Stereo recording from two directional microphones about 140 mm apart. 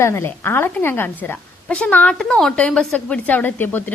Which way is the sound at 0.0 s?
20° left (ahead or behind).